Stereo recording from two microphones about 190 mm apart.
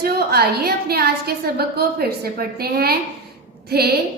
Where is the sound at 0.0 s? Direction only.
55° right (ahead or behind).